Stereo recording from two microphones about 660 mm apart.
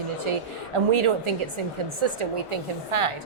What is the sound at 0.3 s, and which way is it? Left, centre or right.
A woman's voice, right.